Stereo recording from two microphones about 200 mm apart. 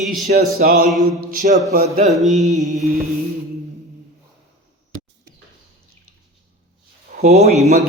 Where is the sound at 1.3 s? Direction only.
40° right (ahead or behind).